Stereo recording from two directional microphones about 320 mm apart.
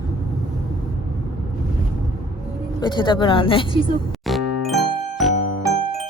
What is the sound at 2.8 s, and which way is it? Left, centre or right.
Speech, centre.